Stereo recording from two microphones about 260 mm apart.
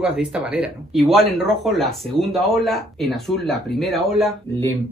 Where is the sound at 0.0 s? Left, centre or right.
Centre.